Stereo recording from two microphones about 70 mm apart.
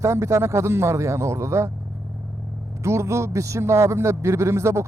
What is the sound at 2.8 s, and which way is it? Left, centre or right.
A man's voice, right.